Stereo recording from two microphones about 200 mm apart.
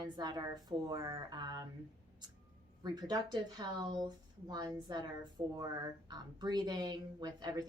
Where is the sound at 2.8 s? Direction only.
20° right (ahead or behind).